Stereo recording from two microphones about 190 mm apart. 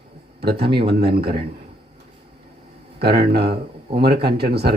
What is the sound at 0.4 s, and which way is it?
Speech, 55° right (ahead or behind).